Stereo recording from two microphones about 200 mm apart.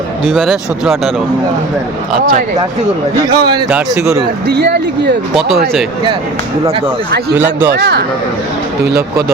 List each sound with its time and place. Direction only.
0.3 s speech: centre (ahead or behind)
3.2 s a man's voice: 20° right (ahead or behind)
3.7 s a man's voice: 5° right (ahead or behind)
4.4 s speech: 55° right (ahead or behind)
5.3 s speech: centre (ahead or behind)
7.3 s a man's voice: 10° right (ahead or behind)
7.7 s speech: 55° right (ahead or behind)